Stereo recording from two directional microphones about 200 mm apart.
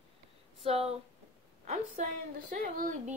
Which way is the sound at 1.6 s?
35° right (ahead or behind).